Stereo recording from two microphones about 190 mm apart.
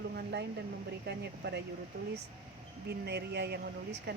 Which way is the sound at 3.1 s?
60° right (ahead or behind).